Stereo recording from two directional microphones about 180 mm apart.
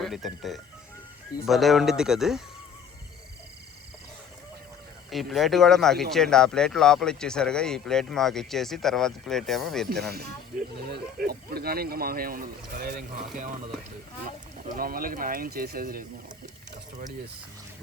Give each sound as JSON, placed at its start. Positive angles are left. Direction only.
{"t": 0.0, "sound": "speech", "side_deg": 0}
{"t": 5.1, "sound": "speech", "side_deg": 0}
{"t": 9.9, "sound": "speech", "side_deg": -60}